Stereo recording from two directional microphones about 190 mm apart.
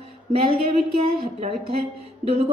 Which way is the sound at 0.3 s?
30° right (ahead or behind).